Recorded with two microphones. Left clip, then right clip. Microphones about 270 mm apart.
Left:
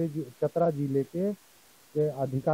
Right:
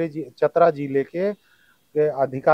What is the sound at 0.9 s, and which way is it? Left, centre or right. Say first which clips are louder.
Speech: right 7 dB; right.